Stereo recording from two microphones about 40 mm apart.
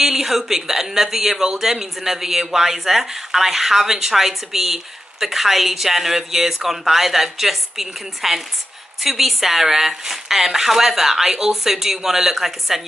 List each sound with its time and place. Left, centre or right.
0.0 s speech: centre